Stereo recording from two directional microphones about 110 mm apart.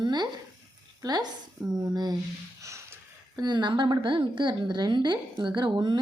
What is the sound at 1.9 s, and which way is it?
Speech, 40° right (ahead or behind).